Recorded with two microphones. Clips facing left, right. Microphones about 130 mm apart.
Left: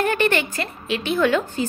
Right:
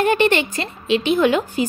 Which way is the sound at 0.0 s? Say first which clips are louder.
Right 4 dB; 20° right (ahead or behind).